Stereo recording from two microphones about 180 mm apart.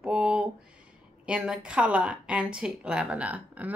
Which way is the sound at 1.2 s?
5° right (ahead or behind).